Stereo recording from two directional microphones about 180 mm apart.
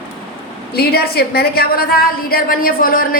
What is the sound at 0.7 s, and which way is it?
A woman's voice, 60° left (ahead or behind).